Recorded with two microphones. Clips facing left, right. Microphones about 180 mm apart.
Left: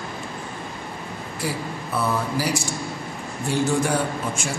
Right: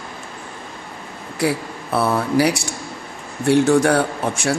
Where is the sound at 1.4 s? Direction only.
70° right (ahead or behind).